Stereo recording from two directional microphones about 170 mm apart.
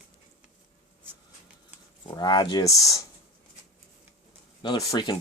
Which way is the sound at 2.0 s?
25° left (ahead or behind).